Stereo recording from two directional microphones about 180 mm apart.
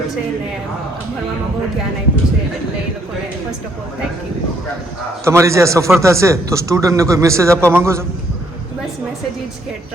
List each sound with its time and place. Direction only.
5.2 s a man's voice: 15° right (ahead or behind)